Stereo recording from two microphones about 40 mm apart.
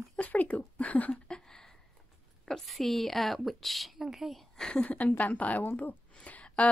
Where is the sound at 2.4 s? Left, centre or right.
Centre.